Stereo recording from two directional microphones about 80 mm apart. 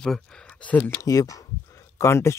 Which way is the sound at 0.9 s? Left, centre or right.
Left.